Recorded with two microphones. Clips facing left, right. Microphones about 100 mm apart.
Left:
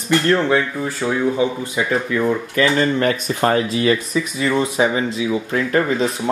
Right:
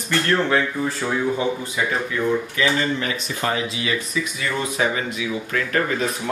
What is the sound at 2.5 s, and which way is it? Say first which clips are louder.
Speech: left 5 dB; 45° left (ahead or behind).